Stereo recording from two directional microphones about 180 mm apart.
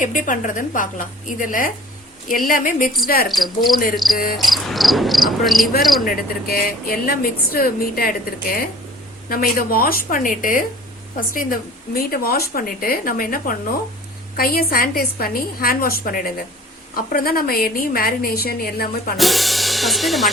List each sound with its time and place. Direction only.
0.0 s a woman's voice: 45° left (ahead or behind)
3.2 s cricket: centre (ahead or behind)
6.1 s a woman's voice: 55° left (ahead or behind)
19.1 s cricket: centre (ahead or behind)